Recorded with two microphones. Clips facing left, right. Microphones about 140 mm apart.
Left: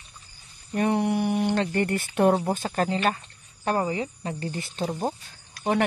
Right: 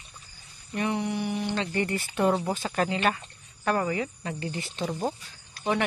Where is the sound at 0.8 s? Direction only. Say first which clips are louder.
Left 5 dB; 50° left (ahead or behind).